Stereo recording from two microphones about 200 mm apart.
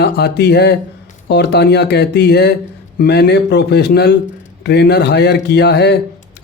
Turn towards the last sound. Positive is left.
turn(degrees=55)  # may be behind; listen again after turning